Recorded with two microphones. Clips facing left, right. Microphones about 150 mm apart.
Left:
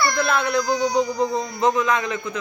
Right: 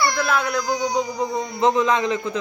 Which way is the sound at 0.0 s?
10° right (ahead or behind).